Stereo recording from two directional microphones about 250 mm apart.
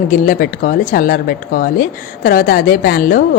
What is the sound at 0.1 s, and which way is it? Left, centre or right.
Speech, left.